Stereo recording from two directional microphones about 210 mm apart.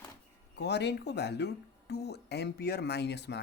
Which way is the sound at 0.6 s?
55° left (ahead or behind).